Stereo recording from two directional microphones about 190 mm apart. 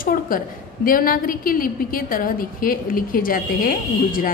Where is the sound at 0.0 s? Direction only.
45° left (ahead or behind).